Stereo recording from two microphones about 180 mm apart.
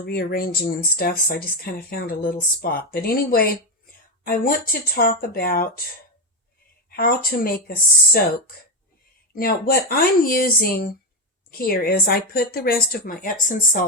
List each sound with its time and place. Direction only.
0.0 s speech: 60° left (ahead or behind)
6.9 s speech: 55° left (ahead or behind)
9.3 s speech: 55° left (ahead or behind)